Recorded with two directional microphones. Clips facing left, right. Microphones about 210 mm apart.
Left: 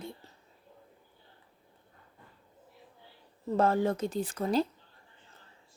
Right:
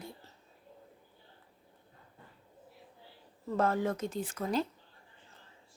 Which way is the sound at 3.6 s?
30° left (ahead or behind).